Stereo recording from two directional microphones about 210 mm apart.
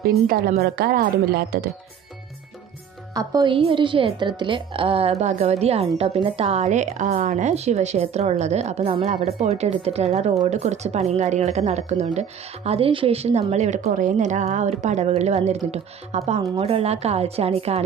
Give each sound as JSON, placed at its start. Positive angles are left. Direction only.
{"t": 0.0, "sound": "a woman's voice", "side_deg": -45}
{"t": 3.2, "sound": "a woman's voice", "side_deg": -20}